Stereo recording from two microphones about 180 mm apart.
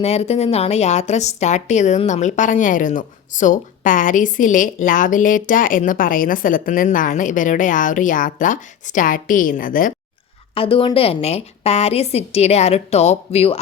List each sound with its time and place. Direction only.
0.0 s a woman's voice: 35° left (ahead or behind)
10.5 s a woman's voice: 30° left (ahead or behind)